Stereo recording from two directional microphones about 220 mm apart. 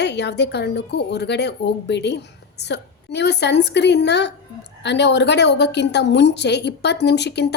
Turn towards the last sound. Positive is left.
turn(degrees=50)  # may be behind; listen again after turning